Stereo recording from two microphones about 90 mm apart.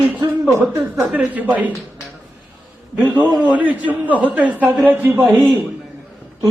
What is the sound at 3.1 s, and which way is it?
A man's voice, 20° right (ahead or behind).